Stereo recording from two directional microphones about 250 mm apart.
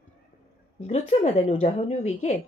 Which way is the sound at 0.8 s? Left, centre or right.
Left.